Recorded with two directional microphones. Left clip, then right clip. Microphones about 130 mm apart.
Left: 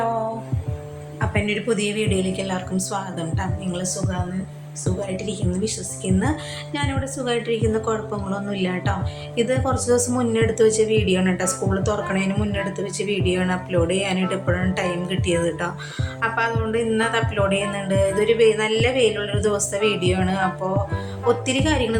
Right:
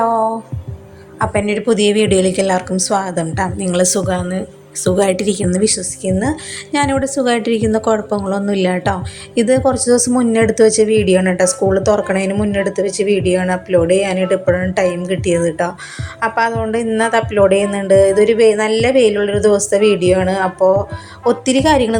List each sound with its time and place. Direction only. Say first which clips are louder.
1.2 s a woman's voice: right 8 dB; 45° right (ahead or behind)
5.1 s speech: right 10 dB; 90° right; by 5.8 s 70° right (ahead or behind)
6.0 s music: right 5 dB; 30° right (ahead or behind)
6.7 s a woman's voice: right 12 dB; 70° right (ahead or behind); by 12.3 s 50° right (ahead or behind)
12.3 s music: right 9 dB; 40° right (ahead or behind)
21.2 s a woman's voice: right 8 dB; 45° right (ahead or behind)